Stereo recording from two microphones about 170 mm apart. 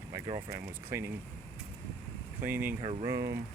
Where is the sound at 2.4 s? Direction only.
10° right (ahead or behind).